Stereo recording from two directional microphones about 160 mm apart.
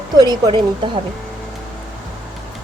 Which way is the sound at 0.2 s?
25° right (ahead or behind).